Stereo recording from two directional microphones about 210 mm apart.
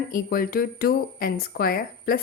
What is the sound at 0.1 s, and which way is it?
Speech, 40° left (ahead or behind).